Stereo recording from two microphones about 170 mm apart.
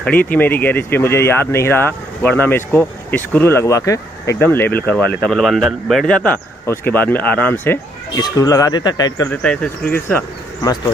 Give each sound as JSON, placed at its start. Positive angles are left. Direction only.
{"t": 0.0, "sound": "speech", "side_deg": 10}
{"t": 9.4, "sound": "speech", "side_deg": 5}